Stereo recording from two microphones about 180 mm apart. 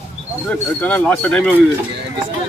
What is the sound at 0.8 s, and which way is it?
Speech, 10° left (ahead or behind).